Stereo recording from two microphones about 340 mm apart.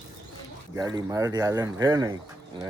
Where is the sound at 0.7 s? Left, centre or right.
Centre.